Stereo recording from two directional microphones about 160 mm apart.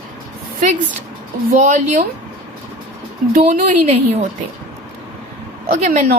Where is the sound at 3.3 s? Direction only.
45° right (ahead or behind).